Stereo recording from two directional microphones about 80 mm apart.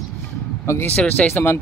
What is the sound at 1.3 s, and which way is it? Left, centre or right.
Speech, left.